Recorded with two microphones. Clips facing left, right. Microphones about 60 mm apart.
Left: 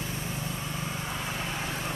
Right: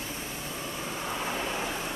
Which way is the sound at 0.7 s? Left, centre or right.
Centre.